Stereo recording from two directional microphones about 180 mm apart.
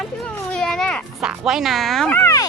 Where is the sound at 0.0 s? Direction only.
5° left (ahead or behind).